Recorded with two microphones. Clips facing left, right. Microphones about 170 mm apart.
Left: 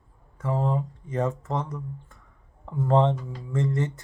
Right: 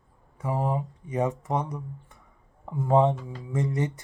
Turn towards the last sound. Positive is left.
turn(degrees=-15)  # may be behind; listen again after turning